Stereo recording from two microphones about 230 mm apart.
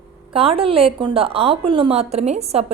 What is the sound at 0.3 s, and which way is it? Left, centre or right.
A woman's voice, right.